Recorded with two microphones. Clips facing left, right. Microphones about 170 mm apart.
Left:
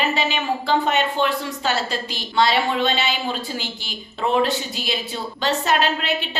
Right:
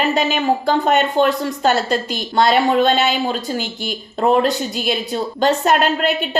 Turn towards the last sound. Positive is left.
turn(degrees=-50)  # may be behind; listen again after turning